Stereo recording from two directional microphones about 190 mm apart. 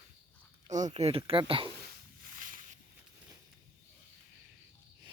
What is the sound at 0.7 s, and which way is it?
Speech, 40° right (ahead or behind).